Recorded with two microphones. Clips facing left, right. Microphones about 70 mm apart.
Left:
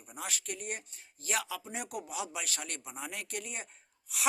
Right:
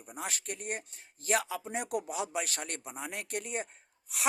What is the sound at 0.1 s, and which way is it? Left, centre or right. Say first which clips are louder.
Speech: right 1 dB; right.